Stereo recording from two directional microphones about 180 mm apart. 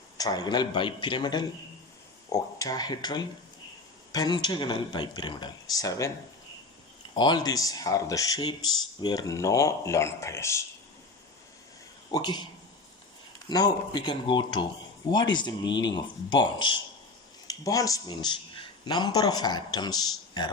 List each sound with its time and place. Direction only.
0.2 s speech: 20° left (ahead or behind)
7.1 s speech: 25° left (ahead or behind)
12.1 s speech: 25° left (ahead or behind)
13.5 s speech: 25° left (ahead or behind)